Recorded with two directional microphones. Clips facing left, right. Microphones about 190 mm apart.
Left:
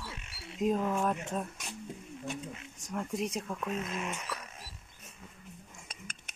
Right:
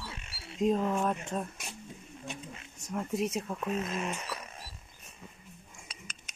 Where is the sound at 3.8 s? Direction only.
35° right (ahead or behind).